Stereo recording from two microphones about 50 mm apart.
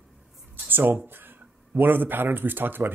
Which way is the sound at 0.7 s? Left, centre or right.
Right.